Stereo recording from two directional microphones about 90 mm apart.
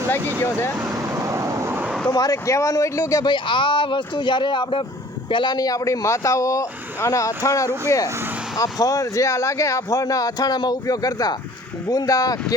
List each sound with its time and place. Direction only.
0.8 s vehicle: 35° right (ahead or behind)
1.7 s a sound: 15° right (ahead or behind)
2.1 s speech: 40° left (ahead or behind)
3.2 s speech: 65° left (ahead or behind); by 12.5 s 45° left (ahead or behind)